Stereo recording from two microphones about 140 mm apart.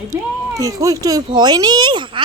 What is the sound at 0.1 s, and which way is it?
A child's voice, 25° right (ahead or behind).